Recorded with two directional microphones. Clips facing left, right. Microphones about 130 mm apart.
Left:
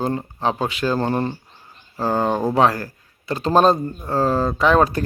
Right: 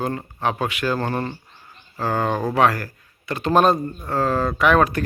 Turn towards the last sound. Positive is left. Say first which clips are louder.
# left 1 dB
turn(degrees=25)  # may be behind; listen again after turning